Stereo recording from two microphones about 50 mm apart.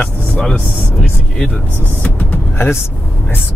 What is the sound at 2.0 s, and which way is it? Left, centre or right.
Vehicle, left.